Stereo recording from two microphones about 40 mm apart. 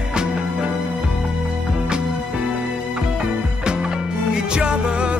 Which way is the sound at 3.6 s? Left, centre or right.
Right.